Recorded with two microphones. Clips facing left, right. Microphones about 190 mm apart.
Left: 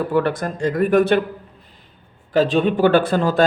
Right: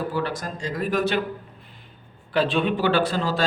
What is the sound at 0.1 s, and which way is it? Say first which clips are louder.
Speech: left 8 dB; 55° left (ahead or behind).